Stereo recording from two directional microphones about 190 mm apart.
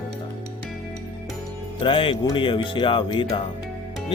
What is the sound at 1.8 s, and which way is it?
Speech, 25° left (ahead or behind).